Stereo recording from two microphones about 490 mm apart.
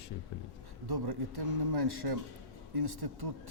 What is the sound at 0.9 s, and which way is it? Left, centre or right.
Speech, right.